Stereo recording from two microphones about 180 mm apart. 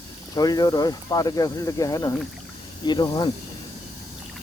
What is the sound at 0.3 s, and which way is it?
Speech, 20° left (ahead or behind).